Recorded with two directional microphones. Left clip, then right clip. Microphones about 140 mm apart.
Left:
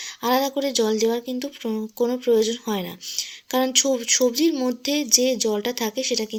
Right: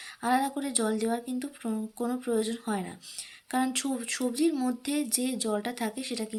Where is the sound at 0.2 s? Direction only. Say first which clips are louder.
Left 6 dB; 15° left (ahead or behind).